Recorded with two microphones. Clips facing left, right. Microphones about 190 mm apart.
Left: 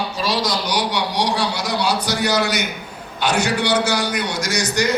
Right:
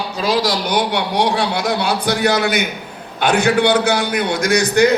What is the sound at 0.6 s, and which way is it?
A man's voice, 55° right (ahead or behind).